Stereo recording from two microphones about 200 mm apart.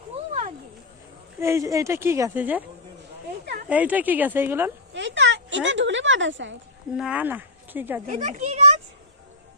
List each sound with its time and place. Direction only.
0.3 s a sound: 35° right (ahead or behind)
1.4 s a woman's voice: 15° right (ahead or behind)
3.7 s a woman's voice: 5° right (ahead or behind)
4.9 s speech: 65° right (ahead or behind)
6.9 s speech: 5° right (ahead or behind)
8.1 s a child's voice: 35° right (ahead or behind)